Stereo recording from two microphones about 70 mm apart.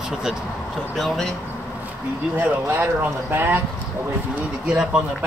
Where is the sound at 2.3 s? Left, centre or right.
Right.